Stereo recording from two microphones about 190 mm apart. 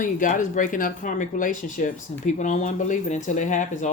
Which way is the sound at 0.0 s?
45° left (ahead or behind).